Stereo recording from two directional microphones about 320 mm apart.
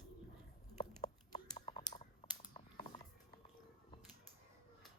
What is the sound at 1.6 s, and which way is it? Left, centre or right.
Typing, centre.